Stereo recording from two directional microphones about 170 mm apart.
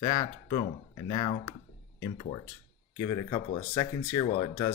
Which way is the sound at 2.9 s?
20° left (ahead or behind).